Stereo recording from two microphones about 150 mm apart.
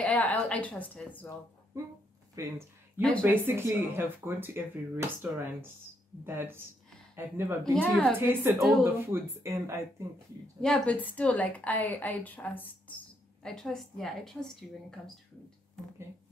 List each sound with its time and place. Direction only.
0.0 s speech: 10° left (ahead or behind)
2.4 s speech: 20° right (ahead or behind)
3.0 s a woman's voice: 5° left (ahead or behind)
3.3 s speech: 15° right (ahead or behind)
7.7 s a woman's voice: 5° left (ahead or behind)
8.2 s speech: 15° right (ahead or behind)
8.5 s a woman's voice: centre (ahead or behind)
9.0 s speech: 15° right (ahead or behind)
10.6 s a woman's voice: 5° left (ahead or behind)